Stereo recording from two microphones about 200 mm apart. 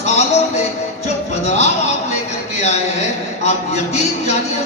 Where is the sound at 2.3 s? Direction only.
35° left (ahead or behind).